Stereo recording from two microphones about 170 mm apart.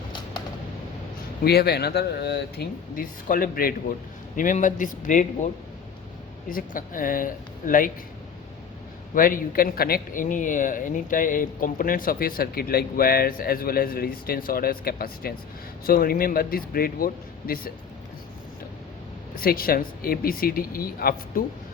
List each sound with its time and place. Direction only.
1.5 s speech: 70° left (ahead or behind); by 5.5 s 50° left (ahead or behind)
6.5 s speech: 55° left (ahead or behind)
9.1 s speech: 55° left (ahead or behind)
19.4 s speech: 60° left (ahead or behind)